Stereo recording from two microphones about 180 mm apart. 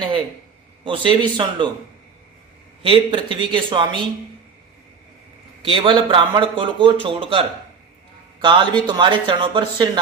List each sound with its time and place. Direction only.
0.9 s a man's voice: 25° right (ahead or behind)
2.8 s a man's voice: 30° right (ahead or behind)
5.6 s a man's voice: 30° right (ahead or behind)